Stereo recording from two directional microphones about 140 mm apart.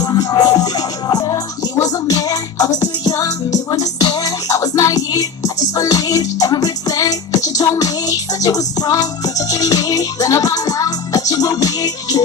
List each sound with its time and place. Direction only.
0.0 s music: 25° left (ahead or behind)